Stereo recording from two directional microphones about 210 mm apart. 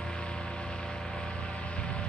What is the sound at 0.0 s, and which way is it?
Vehicle, 5° left (ahead or behind).